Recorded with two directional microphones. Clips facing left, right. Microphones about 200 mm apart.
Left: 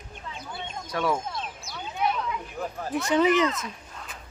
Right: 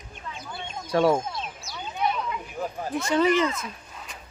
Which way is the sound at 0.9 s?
30° right (ahead or behind).